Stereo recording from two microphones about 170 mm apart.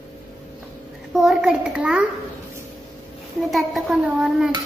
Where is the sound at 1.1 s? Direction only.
Centre (ahead or behind).